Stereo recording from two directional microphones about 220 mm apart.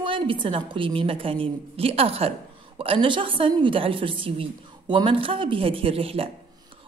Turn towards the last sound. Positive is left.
turn(degrees=-25)  # may be behind; listen again after turning